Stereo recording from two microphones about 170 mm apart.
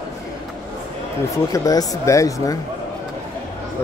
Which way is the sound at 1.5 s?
20° left (ahead or behind).